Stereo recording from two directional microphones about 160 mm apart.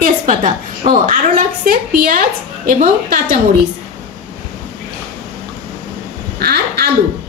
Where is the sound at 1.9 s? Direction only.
65° right (ahead or behind).